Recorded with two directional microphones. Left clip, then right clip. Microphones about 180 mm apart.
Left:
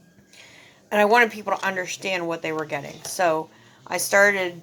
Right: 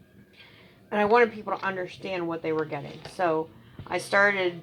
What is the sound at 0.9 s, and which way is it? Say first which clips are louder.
Speech: left 4 dB; 50° left (ahead or behind).